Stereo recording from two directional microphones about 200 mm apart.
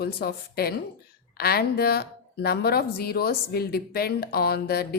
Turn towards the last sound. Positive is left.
turn(degrees=50)  # may be behind; listen again after turning